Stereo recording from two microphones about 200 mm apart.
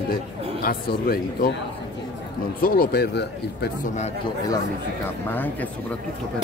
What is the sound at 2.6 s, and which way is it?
A man's voice, 50° left (ahead or behind).